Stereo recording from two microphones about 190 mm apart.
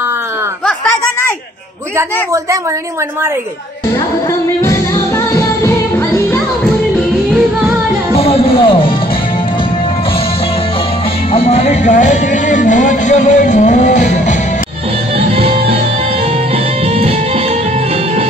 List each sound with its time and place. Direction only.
2.0 s a man's voice: 15° right (ahead or behind)
4.6 s music: 15° left (ahead or behind)
8.2 s music: 30° left (ahead or behind)
11.3 s music: 35° left (ahead or behind)
15.1 s music: 30° right (ahead or behind)
16.8 s music: 30° right (ahead or behind)